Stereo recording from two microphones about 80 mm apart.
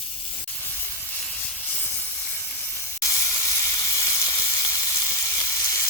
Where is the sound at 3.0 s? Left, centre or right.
Left.